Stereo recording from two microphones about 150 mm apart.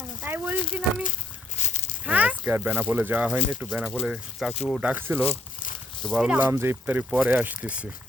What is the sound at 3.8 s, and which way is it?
Speech, centre (ahead or behind).